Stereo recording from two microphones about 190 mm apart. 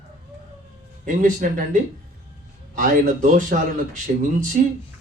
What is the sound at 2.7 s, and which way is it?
A man's voice, 40° right (ahead or behind).